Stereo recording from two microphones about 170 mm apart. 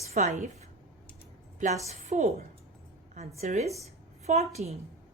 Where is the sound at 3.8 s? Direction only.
40° right (ahead or behind).